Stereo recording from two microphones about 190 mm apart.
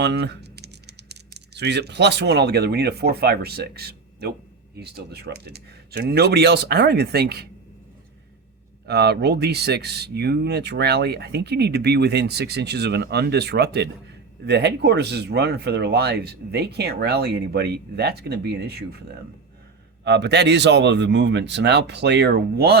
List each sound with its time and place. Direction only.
0.0 s speech: 65° right (ahead or behind)
8.9 s speech: 60° right (ahead or behind)
20.1 s speech: 60° right (ahead or behind)